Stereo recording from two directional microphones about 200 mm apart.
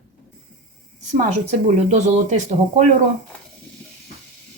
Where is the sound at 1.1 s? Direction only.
35° right (ahead or behind).